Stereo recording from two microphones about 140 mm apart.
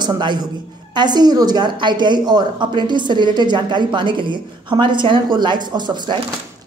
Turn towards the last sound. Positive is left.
turn(degrees=-30)  # may be behind; listen again after turning